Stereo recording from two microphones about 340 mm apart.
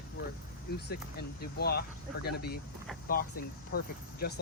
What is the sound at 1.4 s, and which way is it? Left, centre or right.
Speech, left.